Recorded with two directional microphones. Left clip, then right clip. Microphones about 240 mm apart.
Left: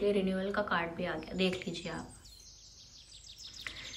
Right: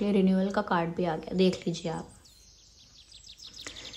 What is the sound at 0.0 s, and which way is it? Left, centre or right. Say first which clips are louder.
A woman's voice: right 4 dB; right.